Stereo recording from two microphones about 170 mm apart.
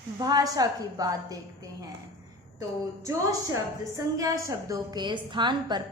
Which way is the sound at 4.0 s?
20° right (ahead or behind).